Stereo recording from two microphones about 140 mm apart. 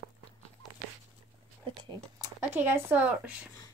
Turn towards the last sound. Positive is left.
turn(degrees=-10)  # may be behind; listen again after turning